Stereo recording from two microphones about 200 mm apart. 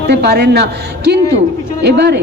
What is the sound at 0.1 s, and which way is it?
A woman's voice, 55° right (ahead or behind).